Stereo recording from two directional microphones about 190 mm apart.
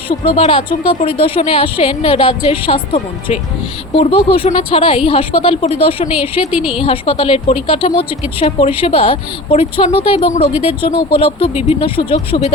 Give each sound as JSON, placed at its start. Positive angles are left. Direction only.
{"t": 0.1, "sound": "a woman's voice", "side_deg": 30}
{"t": 6.5, "sound": "a woman's voice", "side_deg": -5}
{"t": 6.8, "sound": "a woman's voice", "side_deg": 30}